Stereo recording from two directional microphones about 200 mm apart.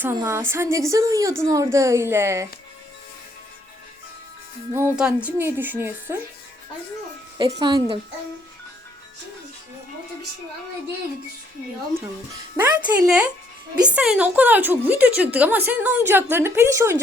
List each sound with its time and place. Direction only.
0.0 s a woman's voice: 15° right (ahead or behind)
4.7 s a woman's voice: 10° right (ahead or behind)
7.3 s speech: 20° right (ahead or behind)
12.5 s a woman's voice: 10° right (ahead or behind)